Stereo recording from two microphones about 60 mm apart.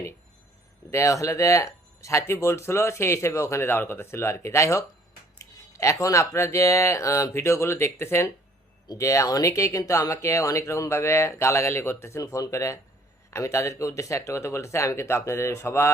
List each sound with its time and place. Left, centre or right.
0.9 s speech: left
3.7 s speech: left
8.9 s speech: left
12.2 s speech: left